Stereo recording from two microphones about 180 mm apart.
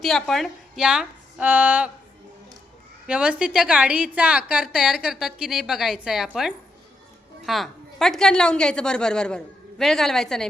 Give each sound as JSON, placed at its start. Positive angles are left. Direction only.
{"t": 0.0, "sound": "a woman's voice", "side_deg": 0}
{"t": 3.1, "sound": "a woman's voice", "side_deg": -5}